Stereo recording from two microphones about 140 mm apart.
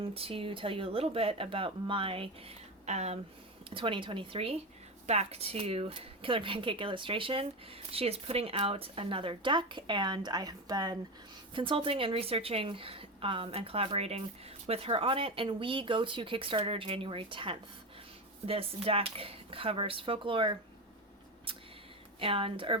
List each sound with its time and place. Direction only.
0.0 s speech: 45° right (ahead or behind)
3.8 s speech: 35° right (ahead or behind)
22.2 s speech: 40° right (ahead or behind)